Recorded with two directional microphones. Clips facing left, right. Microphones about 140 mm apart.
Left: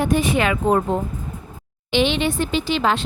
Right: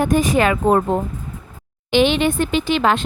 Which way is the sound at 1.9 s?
50° right (ahead or behind).